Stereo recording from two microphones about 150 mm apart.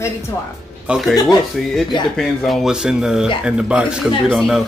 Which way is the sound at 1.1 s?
25° left (ahead or behind).